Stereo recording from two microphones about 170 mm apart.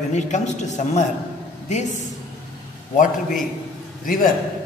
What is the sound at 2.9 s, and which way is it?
A woman's voice, 50° left (ahead or behind).